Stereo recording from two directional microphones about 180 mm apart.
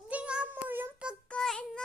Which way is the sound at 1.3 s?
5° left (ahead or behind).